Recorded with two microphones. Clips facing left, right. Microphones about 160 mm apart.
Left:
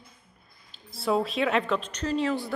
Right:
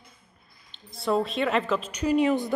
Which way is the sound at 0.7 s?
Centre (ahead or behind).